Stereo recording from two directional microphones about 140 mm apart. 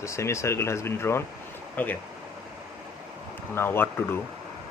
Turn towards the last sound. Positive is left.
turn(degrees=15)  # may be behind; listen again after turning